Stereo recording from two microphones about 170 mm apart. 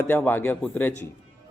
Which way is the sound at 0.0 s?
10° left (ahead or behind).